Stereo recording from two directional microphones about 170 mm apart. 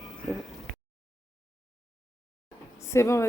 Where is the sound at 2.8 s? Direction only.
15° left (ahead or behind).